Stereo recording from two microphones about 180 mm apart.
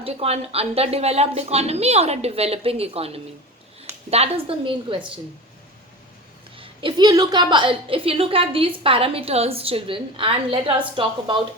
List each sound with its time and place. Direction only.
0.0 s a woman's voice: 35° right (ahead or behind)
6.6 s a woman's voice: 25° right (ahead or behind)